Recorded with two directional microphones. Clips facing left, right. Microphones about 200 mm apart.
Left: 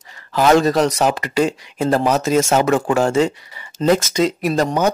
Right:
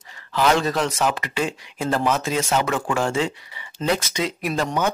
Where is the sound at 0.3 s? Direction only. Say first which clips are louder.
Left 6 dB; 40° left (ahead or behind).